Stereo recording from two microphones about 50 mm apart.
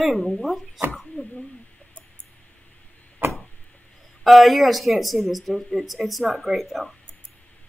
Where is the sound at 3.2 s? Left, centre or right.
Right.